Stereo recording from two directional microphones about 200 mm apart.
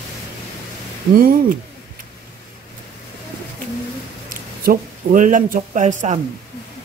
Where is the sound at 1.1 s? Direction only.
45° right (ahead or behind).